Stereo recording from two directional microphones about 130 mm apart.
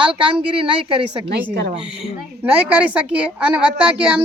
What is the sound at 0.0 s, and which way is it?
Speech, 40° right (ahead or behind).